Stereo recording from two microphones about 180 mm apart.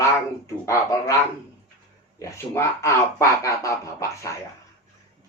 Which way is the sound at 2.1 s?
15° left (ahead or behind).